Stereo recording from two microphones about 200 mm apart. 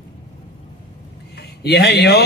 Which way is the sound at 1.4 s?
55° left (ahead or behind).